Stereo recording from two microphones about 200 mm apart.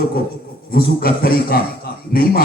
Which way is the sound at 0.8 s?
50° left (ahead or behind).